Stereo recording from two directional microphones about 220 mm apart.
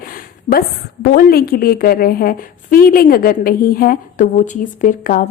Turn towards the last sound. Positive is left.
turn(degrees=35)  # may be behind; listen again after turning